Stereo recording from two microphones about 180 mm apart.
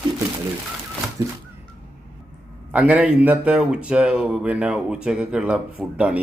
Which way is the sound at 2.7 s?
5° right (ahead or behind).